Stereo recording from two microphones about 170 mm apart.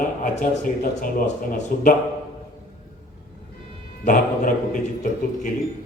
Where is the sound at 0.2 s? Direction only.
55° left (ahead or behind).